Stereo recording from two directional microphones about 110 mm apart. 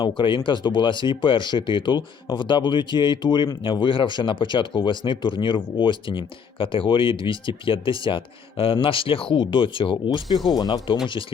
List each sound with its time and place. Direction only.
0.2 s speech: 45° left (ahead or behind)